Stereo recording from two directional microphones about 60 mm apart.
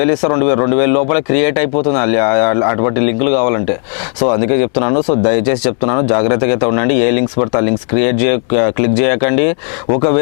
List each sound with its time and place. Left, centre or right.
0.0 s speech: left